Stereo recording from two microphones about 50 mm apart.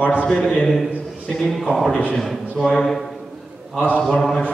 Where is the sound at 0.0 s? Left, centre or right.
Left.